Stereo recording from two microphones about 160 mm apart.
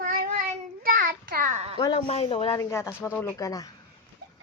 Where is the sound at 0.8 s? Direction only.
60° right (ahead or behind).